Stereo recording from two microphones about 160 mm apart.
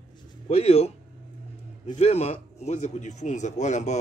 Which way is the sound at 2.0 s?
40° left (ahead or behind).